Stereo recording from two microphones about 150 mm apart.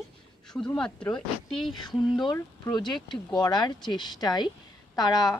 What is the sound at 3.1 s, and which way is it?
Speech, 30° left (ahead or behind).